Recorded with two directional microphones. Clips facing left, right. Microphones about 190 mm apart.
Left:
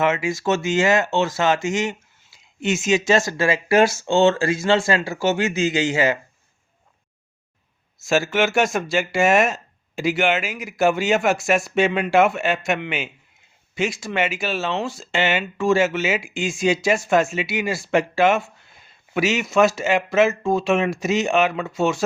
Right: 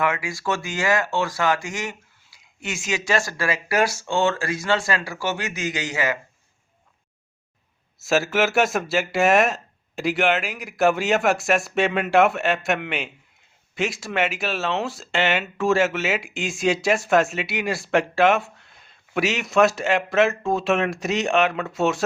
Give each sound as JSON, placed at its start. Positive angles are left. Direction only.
{"t": 0.0, "sound": "speech", "side_deg": 25}
{"t": 7.9, "sound": "speech", "side_deg": 0}